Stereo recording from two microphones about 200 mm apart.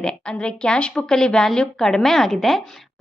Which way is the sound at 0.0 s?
5° left (ahead or behind).